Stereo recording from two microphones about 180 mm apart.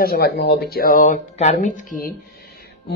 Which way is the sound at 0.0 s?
60° left (ahead or behind).